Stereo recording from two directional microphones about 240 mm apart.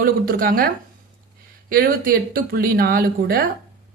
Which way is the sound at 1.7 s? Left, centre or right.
Right.